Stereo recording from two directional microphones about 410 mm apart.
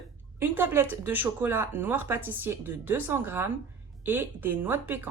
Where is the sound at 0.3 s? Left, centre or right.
Centre.